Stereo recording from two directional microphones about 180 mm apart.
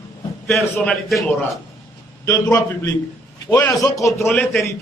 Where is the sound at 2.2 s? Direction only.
15° left (ahead or behind).